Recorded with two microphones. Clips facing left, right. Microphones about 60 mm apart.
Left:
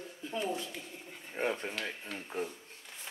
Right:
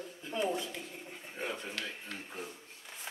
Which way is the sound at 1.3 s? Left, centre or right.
Left.